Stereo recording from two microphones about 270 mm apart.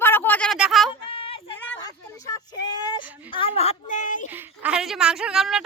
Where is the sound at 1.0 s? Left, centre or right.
Centre.